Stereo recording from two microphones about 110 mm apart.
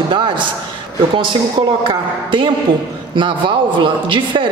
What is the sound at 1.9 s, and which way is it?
A woman's voice, 50° right (ahead or behind).